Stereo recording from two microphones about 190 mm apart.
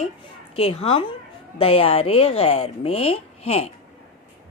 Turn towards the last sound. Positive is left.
turn(degrees=35)  # may be behind; listen again after turning